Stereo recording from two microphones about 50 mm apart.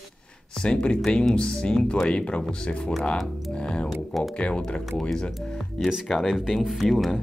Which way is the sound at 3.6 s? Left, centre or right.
Centre.